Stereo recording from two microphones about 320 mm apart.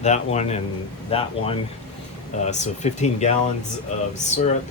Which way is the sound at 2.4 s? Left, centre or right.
Left.